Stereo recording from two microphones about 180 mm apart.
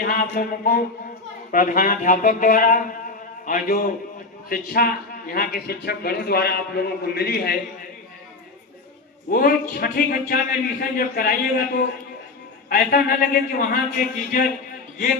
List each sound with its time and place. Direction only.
0.0 s a man's voice: 55° left (ahead or behind)
9.3 s a man's voice: 55° left (ahead or behind)
12.6 s a man's voice: 55° left (ahead or behind)